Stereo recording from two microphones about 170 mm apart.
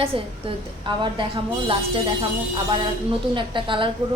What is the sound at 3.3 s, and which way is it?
Speech, 30° right (ahead or behind).